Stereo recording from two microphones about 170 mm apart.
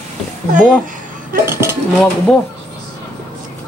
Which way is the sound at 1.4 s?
15° right (ahead or behind).